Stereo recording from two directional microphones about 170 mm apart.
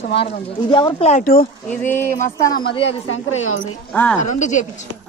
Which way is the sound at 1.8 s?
10° left (ahead or behind).